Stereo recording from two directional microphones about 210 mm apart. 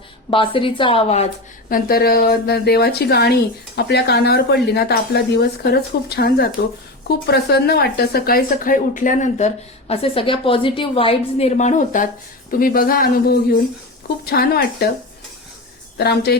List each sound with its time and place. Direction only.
0.3 s a woman's voice: 25° left (ahead or behind)
1.7 s a woman's voice: 45° left (ahead or behind)
16.0 s speech: 50° left (ahead or behind)